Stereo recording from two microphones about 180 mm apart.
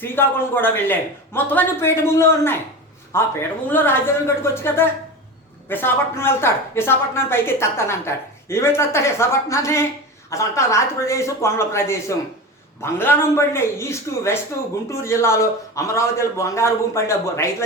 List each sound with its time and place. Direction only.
0.0 s a woman's voice: 10° left (ahead or behind)